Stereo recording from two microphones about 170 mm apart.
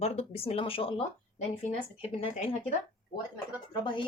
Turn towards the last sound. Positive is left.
turn(degrees=30)  # may be behind; listen again after turning